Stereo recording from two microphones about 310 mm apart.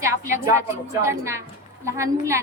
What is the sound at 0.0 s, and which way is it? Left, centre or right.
Speech, centre.